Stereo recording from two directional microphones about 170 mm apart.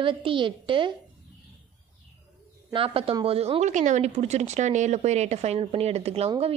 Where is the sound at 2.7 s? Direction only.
35° right (ahead or behind).